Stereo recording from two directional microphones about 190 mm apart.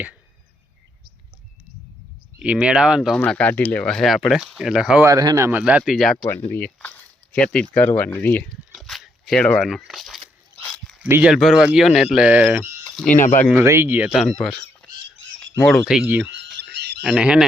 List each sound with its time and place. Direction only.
2.4 s speech: 5° right (ahead or behind)
3.2 s speech: 5° left (ahead or behind)
5.0 s speech: 20° right (ahead or behind); by 8.4 s 10° left (ahead or behind)
8.7 s a sound: centre (ahead or behind)
11.1 s speech: 5° right (ahead or behind)
13.1 s speech: 40° left (ahead or behind)
13.6 s speech: 10° right (ahead or behind)
16.6 s a sound: 60° right (ahead or behind)
17.0 s speech: 5° right (ahead or behind)